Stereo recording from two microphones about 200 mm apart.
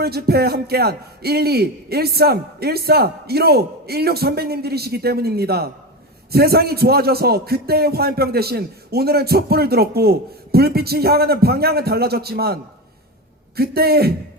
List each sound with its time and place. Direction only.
0.0 s speech: 50° right (ahead or behind)
13.6 s speech: 50° right (ahead or behind)